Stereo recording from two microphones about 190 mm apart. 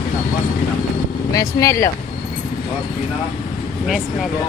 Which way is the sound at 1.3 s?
15° left (ahead or behind).